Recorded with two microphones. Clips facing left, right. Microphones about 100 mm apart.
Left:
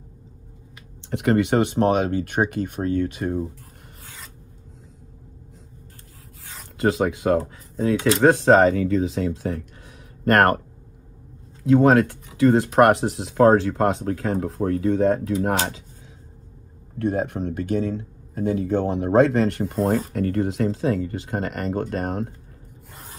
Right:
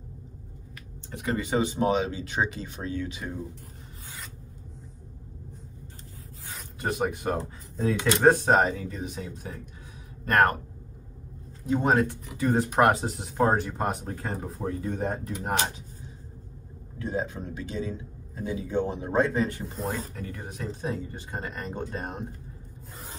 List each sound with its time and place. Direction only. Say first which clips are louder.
1.1 s speech: left 8 dB; 70° left (ahead or behind); by 3.4 s 50° left (ahead or behind)
6.8 s speech: left 8 dB; 90° left
10.2 s speech: left 5 dB; 70° left (ahead or behind)
11.6 s speech: left 8 dB; 90° left
17.0 s speech: left 7 dB; 60° left (ahead or behind); by 22.3 s 90° left